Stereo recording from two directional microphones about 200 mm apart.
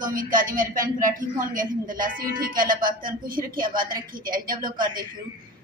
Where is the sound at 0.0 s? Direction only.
40° right (ahead or behind).